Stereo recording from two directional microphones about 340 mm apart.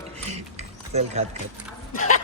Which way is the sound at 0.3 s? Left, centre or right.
Centre.